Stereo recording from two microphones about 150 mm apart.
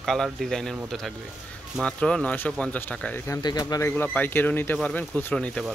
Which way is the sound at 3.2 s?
25° left (ahead or behind).